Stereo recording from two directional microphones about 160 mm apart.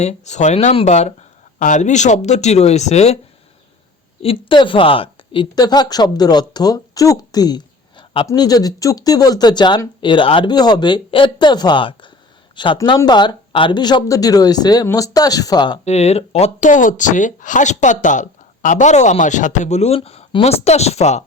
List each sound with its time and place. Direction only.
0.0 s speech: 45° left (ahead or behind)
4.2 s speech: 35° left (ahead or behind)
15.8 s speech: 40° left (ahead or behind)